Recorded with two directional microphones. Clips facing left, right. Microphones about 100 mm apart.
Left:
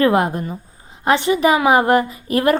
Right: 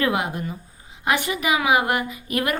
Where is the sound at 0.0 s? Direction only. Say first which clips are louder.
Left 7 dB; 40° left (ahead or behind).